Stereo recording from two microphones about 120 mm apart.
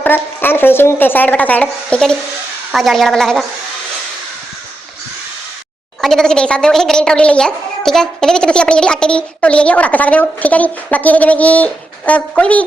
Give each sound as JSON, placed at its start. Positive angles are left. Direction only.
{"t": 0.0, "sound": "speech", "side_deg": 15}
{"t": 2.7, "sound": "speech", "side_deg": 0}
{"t": 6.0, "sound": "speech", "side_deg": 5}